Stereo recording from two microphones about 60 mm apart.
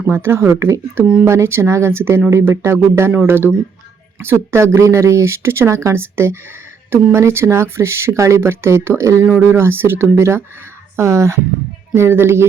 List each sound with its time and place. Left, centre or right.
0.0 s speech: right
3.1 s speech: right